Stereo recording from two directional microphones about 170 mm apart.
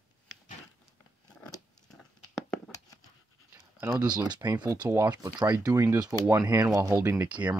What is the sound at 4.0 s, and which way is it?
Speech, 25° right (ahead or behind).